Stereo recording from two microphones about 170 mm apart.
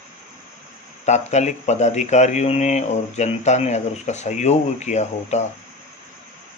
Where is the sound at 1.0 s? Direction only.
40° left (ahead or behind).